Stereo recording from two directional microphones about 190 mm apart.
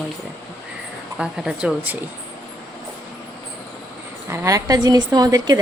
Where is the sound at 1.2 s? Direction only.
5° right (ahead or behind).